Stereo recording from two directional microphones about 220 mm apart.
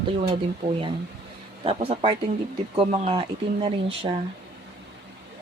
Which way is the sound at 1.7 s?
25° right (ahead or behind).